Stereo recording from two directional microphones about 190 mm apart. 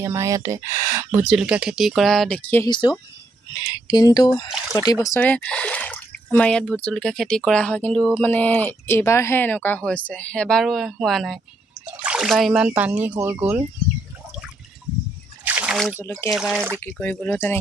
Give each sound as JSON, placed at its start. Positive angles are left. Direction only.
{"t": 0.0, "sound": "speech", "side_deg": -15}
{"t": 1.2, "sound": "speech", "side_deg": -5}
{"t": 2.7, "sound": "speech", "side_deg": 25}
{"t": 5.0, "sound": "speech", "side_deg": 10}
{"t": 15.4, "sound": "a sound", "side_deg": -5}
{"t": 16.3, "sound": "speech", "side_deg": 0}
{"t": 16.8, "sound": "speech", "side_deg": 10}